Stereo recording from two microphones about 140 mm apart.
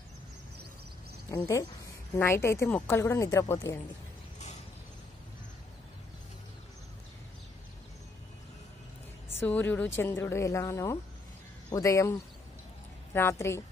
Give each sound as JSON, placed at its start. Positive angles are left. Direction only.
{"t": 1.3, "sound": "speech", "side_deg": 25}
{"t": 9.3, "sound": "a woman's voice", "side_deg": 15}